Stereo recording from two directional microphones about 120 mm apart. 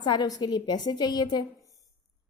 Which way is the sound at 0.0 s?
40° left (ahead or behind).